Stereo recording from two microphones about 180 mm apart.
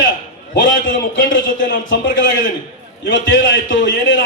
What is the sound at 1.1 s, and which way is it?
Speech, 85° left.